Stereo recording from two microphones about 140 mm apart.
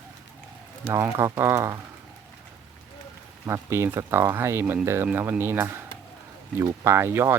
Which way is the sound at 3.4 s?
15° right (ahead or behind).